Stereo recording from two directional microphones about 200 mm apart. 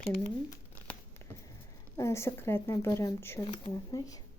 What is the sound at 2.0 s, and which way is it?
Speech, 15° left (ahead or behind).